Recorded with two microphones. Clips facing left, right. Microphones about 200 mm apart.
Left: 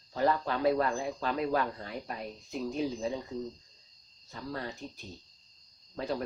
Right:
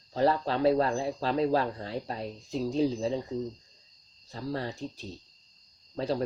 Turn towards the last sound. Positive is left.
turn(degrees=-30)  # may be behind; listen again after turning